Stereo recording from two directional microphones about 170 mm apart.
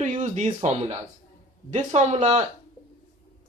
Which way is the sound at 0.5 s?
35° right (ahead or behind).